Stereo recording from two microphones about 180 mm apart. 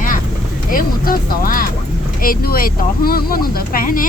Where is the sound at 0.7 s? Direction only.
50° left (ahead or behind).